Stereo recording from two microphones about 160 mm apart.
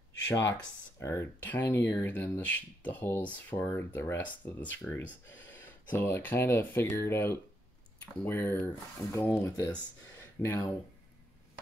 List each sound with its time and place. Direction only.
0.9 s speech: 15° left (ahead or behind)